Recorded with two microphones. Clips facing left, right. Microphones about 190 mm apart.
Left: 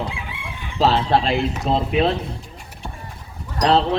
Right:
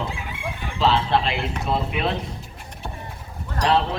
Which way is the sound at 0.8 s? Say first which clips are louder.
Left 3 dB; 40° left (ahead or behind).